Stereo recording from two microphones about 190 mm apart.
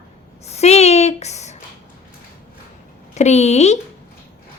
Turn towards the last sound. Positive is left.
turn(degrees=35)  # may be behind; listen again after turning